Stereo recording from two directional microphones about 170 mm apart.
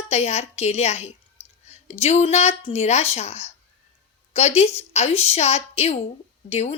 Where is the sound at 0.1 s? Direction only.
40° left (ahead or behind).